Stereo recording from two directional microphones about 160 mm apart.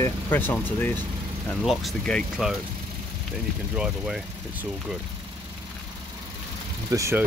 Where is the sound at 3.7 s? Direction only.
5° right (ahead or behind).